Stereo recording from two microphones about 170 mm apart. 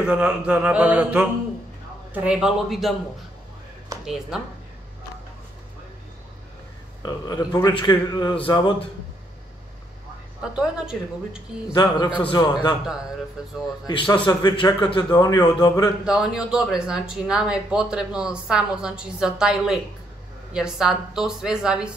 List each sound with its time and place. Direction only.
0.0 s mantra: 5° right (ahead or behind)
2.1 s a woman's voice: 5° right (ahead or behind)
4.0 s a woman's voice: centre (ahead or behind)
7.0 s a man's voice: 25° left (ahead or behind)
10.4 s a woman's voice: 5° right (ahead or behind)
11.7 s a man's voice: 25° left (ahead or behind)
13.4 s a woman's voice: 5° right (ahead or behind)
14.2 s a man's voice: 25° left (ahead or behind)
16.1 s a woman's voice: 5° right (ahead or behind)